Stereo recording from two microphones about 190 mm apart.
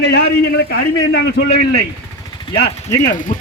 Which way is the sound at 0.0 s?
60° left (ahead or behind).